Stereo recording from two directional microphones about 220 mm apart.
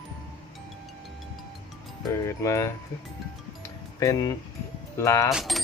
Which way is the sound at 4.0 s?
15° left (ahead or behind).